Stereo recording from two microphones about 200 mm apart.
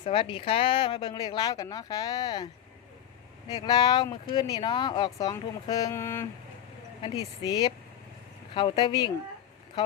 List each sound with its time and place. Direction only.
0.1 s speech: 25° left (ahead or behind)
3.5 s speech: 20° left (ahead or behind)
7.4 s speech: 20° left (ahead or behind)